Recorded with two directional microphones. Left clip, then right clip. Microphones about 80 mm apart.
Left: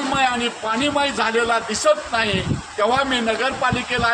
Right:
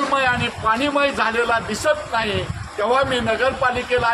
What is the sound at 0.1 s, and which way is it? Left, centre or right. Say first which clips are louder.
A man's voice: right 1 dB; right.